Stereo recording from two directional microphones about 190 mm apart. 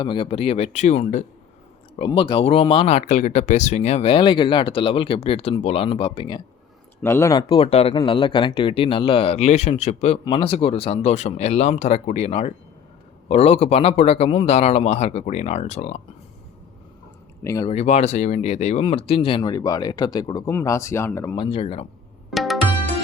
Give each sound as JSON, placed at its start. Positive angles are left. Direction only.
{"t": 0.0, "sound": "speech", "side_deg": 25}
{"t": 7.0, "sound": "speech", "side_deg": 15}
{"t": 17.4, "sound": "speech", "side_deg": 15}
{"t": 17.7, "sound": "speech", "side_deg": 35}
{"t": 21.3, "sound": "speech", "side_deg": 30}
{"t": 22.3, "sound": "music", "side_deg": 0}